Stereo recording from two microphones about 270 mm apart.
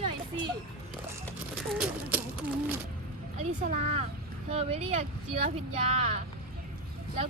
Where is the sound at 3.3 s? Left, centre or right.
Right.